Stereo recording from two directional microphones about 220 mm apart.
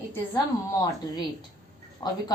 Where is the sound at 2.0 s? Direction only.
20° left (ahead or behind).